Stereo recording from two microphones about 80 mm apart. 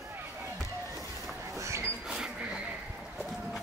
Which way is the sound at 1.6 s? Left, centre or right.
Right.